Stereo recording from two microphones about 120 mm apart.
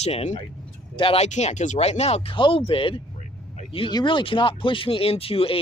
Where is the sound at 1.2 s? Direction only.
70° left (ahead or behind); by 5.6 s 50° left (ahead or behind).